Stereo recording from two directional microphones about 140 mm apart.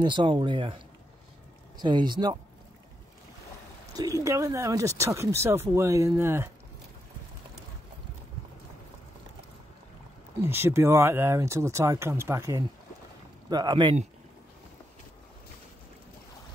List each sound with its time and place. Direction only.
0.0 s speech: 35° right (ahead or behind)
3.9 s speech: 25° right (ahead or behind)
10.4 s speech: 15° right (ahead or behind); by 13.9 s 35° right (ahead or behind)